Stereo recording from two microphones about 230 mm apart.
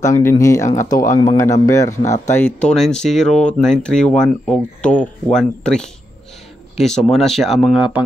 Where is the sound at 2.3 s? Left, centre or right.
Centre.